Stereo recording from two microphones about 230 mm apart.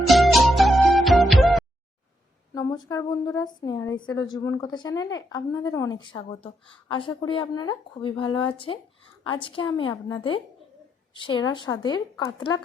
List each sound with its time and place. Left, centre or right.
0.1 s music: centre
2.6 s speech: centre